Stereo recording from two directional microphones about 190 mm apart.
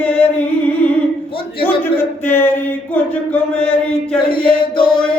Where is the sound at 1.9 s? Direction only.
10° left (ahead or behind).